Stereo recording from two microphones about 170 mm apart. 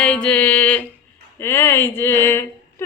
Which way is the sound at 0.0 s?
5° left (ahead or behind).